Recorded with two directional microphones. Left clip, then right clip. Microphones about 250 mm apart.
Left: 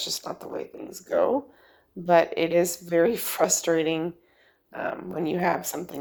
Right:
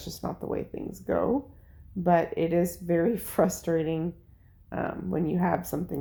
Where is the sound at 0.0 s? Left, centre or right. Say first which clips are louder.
Left 4 dB; left.